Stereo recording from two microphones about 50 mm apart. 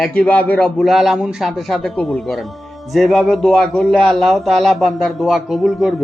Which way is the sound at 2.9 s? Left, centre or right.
Centre.